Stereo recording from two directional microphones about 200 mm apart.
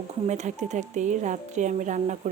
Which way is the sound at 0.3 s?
35° right (ahead or behind).